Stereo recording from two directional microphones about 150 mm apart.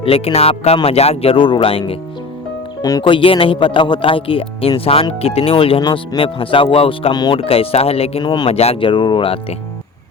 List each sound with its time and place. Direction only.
0.0 s speech: 40° left (ahead or behind)
2.8 s speech: 30° left (ahead or behind)
8.4 s speech: 40° left (ahead or behind)